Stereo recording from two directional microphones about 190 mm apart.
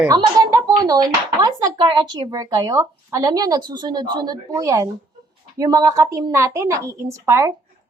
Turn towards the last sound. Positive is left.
turn(degrees=-15)  # may be behind; listen again after turning